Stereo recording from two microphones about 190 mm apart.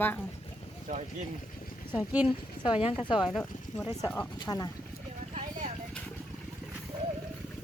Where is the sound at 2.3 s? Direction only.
25° left (ahead or behind).